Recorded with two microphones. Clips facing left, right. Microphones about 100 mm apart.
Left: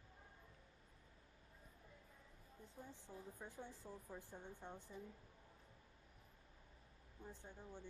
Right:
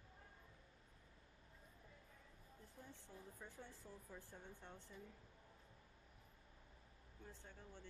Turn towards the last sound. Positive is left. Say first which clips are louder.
# left 4 dB
turn(degrees=15)  # may be behind; listen again after turning